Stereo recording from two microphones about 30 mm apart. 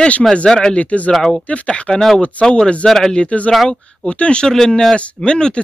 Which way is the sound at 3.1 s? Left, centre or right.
Left.